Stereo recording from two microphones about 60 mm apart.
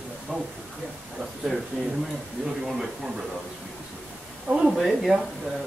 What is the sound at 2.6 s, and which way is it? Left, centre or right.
Speech, centre.